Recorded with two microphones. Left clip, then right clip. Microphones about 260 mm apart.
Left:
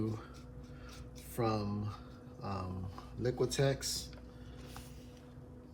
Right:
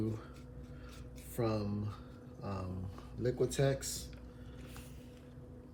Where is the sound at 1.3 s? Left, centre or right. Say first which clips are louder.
Left 1 dB; left.